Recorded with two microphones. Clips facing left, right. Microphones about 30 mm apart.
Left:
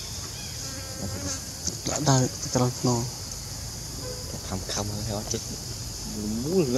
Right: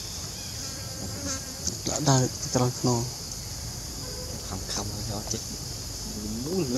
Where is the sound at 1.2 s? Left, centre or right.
Centre.